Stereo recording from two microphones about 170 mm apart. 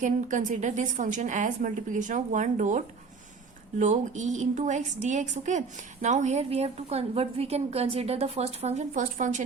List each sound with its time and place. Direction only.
0.0 s a woman's voice: 45° right (ahead or behind)